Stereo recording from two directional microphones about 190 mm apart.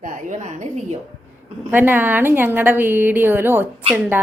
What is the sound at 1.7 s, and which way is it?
A woman's voice, 10° right (ahead or behind).